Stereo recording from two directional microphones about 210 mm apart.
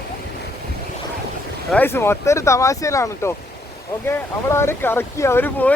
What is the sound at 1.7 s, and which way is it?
Speech, 10° left (ahead or behind).